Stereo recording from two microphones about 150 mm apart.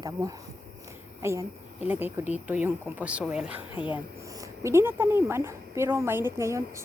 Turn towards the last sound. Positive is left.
turn(degrees=-20)  # may be behind; listen again after turning